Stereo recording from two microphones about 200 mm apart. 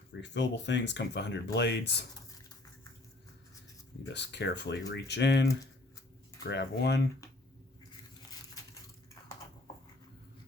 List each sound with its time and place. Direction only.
0.1 s speech: 60° left (ahead or behind)
4.1 s speech: 60° left (ahead or behind)
6.5 s speech: 55° left (ahead or behind)